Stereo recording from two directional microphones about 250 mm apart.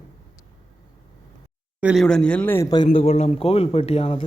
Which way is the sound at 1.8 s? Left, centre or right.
Centre.